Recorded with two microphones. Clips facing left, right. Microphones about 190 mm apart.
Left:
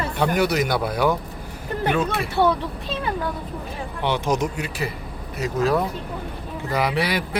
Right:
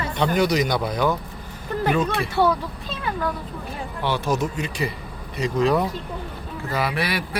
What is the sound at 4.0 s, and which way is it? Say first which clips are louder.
Speech: left 1 dB; 20° left (ahead or behind).